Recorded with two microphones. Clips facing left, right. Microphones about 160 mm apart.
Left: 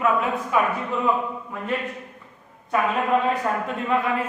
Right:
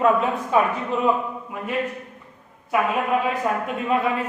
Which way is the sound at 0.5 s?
30° right (ahead or behind).